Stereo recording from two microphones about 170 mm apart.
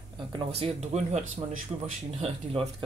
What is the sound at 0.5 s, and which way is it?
Speech, 35° right (ahead or behind).